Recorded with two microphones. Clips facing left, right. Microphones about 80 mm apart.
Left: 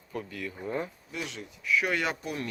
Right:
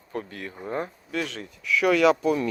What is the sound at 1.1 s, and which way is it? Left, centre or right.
Speech, right.